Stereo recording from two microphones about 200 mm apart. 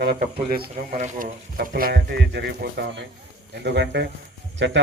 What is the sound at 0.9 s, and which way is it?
A man's voice, 35° right (ahead or behind).